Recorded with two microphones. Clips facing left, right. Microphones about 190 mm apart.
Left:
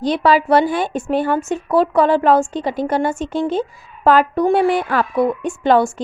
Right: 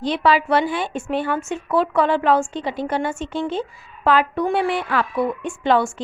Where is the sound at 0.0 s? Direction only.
40° left (ahead or behind).